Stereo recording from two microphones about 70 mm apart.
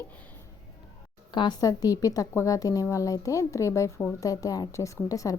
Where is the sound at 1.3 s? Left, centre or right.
Left.